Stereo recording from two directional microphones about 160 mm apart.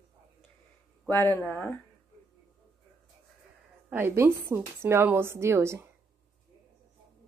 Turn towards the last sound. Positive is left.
turn(degrees=-15)  # may be behind; listen again after turning